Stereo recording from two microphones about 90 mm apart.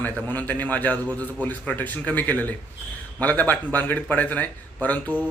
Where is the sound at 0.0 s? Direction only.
20° left (ahead or behind).